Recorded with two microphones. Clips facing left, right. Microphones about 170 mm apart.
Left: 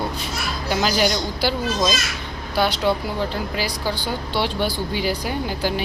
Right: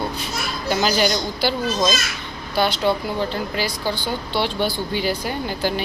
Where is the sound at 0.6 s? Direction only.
5° left (ahead or behind).